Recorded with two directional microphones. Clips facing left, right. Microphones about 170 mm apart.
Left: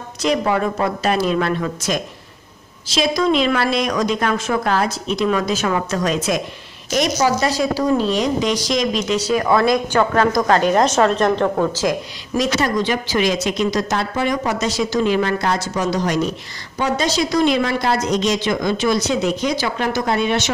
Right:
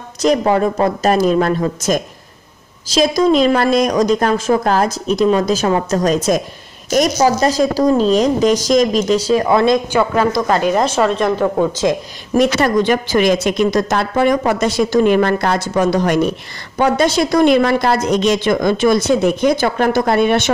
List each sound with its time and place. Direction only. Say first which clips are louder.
0.2 s a woman's voice: right 5 dB; 40° right (ahead or behind)
9.1 s speech: right 1 dB; 30° right (ahead or behind)
9.9 s a woman's voice: right 1 dB; 5° right (ahead or behind)
11.7 s speech: right 4 dB; 25° right (ahead or behind)
12.4 s speech: right 5 dB; 55° right (ahead or behind)